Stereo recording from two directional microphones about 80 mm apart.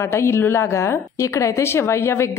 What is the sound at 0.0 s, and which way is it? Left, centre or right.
A woman's voice, left.